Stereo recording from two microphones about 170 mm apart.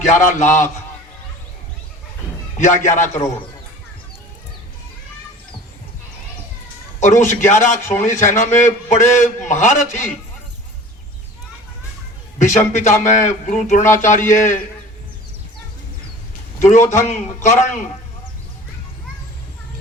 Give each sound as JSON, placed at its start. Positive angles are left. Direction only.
{"t": 0.0, "sound": "a man's voice", "side_deg": 45}
{"t": 2.6, "sound": "a man's voice", "side_deg": 45}
{"t": 7.0, "sound": "a man's voice", "side_deg": 45}
{"t": 12.4, "sound": "a man's voice", "side_deg": 45}
{"t": 16.6, "sound": "a man's voice", "side_deg": 45}